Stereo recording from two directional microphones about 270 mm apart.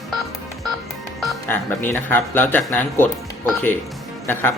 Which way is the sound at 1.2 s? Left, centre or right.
Centre.